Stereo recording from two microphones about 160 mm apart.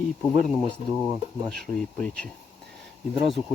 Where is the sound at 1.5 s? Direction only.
5° left (ahead or behind).